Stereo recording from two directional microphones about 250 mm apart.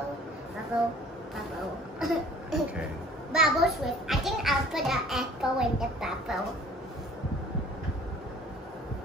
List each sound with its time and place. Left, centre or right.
2.0 s cough: centre
3.3 s a child's voice: centre